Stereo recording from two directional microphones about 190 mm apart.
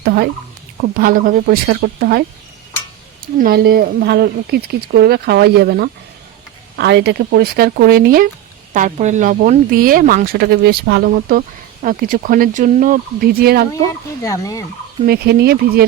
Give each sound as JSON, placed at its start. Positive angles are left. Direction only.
{"t": 0.0, "sound": "speech", "side_deg": -55}
{"t": 3.3, "sound": "speech", "side_deg": -50}
{"t": 8.7, "sound": "speech", "side_deg": -40}
{"t": 14.2, "sound": "speech", "side_deg": 15}
{"t": 15.0, "sound": "speech", "side_deg": -55}